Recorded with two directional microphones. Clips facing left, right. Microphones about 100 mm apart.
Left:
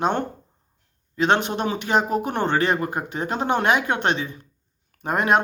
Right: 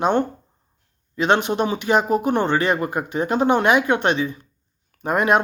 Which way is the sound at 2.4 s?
30° left (ahead or behind).